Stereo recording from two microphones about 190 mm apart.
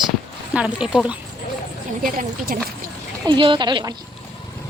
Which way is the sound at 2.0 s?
45° right (ahead or behind).